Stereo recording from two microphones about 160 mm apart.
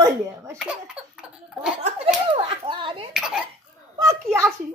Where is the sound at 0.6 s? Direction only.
5° right (ahead or behind).